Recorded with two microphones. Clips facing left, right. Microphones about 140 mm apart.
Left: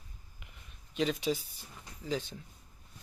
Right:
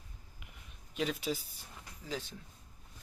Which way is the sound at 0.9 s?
5° right (ahead or behind).